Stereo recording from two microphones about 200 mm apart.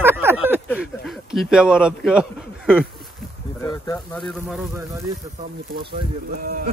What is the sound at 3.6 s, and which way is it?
Speech, 20° left (ahead or behind).